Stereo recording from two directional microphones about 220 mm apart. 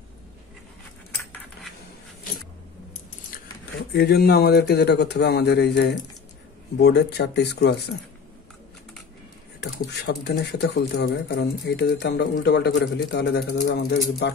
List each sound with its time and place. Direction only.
3.9 s speech: 50° left (ahead or behind)
9.8 s speech: 50° left (ahead or behind)